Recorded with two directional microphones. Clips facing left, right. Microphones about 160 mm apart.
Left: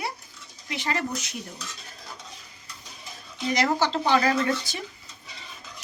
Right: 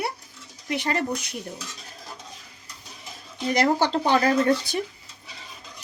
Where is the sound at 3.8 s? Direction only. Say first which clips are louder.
Right 2 dB; 45° right (ahead or behind).